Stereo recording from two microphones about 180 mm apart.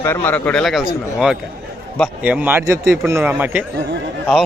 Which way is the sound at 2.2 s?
10° right (ahead or behind).